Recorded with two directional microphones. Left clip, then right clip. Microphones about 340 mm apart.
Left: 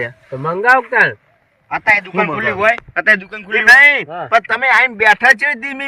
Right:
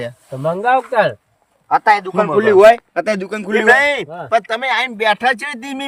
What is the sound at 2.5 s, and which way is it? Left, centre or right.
Speech, right.